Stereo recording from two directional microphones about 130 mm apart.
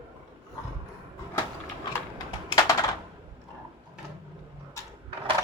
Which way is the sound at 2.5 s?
25° left (ahead or behind).